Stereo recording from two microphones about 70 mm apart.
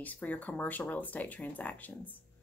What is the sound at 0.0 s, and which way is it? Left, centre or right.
Speech, left.